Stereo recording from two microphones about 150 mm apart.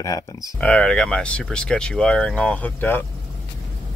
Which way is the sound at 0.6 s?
5° left (ahead or behind).